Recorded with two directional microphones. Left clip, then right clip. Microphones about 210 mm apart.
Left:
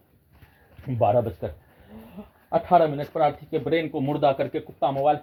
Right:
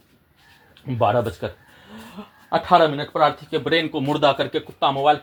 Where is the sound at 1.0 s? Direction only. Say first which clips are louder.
Right 2 dB; 25° right (ahead or behind).